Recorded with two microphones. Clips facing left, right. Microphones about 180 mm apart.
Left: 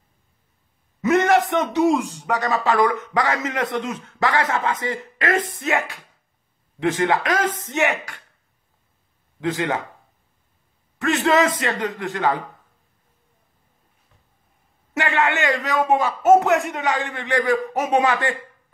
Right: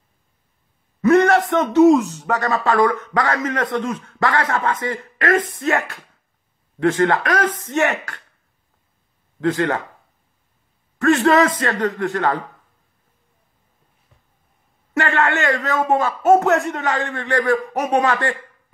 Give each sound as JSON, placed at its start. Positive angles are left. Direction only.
{"t": 1.0, "sound": "a sound", "side_deg": 20}
{"t": 1.5, "sound": "a man's voice", "side_deg": 15}
{"t": 9.4, "sound": "a man's voice", "side_deg": 20}
{"t": 11.1, "sound": "a man's voice", "side_deg": 20}
{"t": 15.0, "sound": "a man's voice", "side_deg": 20}